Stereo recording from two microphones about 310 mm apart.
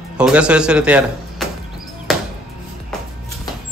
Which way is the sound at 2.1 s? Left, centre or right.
Centre.